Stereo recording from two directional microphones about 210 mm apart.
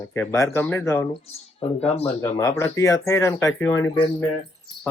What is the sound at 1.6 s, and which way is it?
Speech, 30° left (ahead or behind).